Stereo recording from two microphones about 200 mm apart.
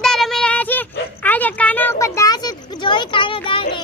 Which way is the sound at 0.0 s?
Centre (ahead or behind).